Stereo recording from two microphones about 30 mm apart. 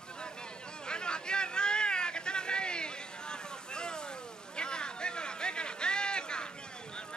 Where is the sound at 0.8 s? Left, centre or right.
Left.